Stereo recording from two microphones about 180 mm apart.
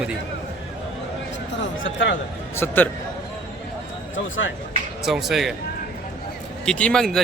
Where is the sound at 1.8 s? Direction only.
90° left.